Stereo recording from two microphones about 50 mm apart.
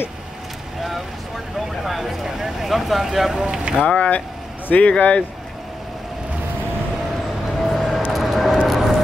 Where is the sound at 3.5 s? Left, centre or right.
Centre.